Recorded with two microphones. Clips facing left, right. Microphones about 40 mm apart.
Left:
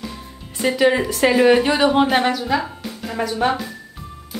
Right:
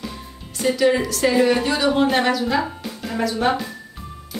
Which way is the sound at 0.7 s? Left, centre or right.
Left.